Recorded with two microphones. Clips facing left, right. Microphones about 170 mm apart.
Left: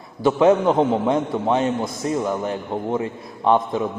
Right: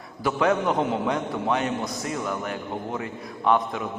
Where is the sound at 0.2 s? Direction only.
25° left (ahead or behind).